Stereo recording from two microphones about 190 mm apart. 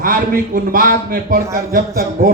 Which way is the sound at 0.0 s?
45° right (ahead or behind).